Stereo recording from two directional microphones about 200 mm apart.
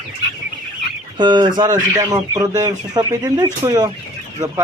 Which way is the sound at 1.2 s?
20° right (ahead or behind).